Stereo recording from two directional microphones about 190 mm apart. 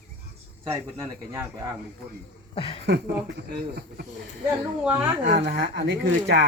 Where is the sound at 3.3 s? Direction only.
55° right (ahead or behind).